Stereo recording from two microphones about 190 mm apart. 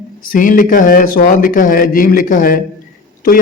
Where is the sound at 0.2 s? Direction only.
45° left (ahead or behind).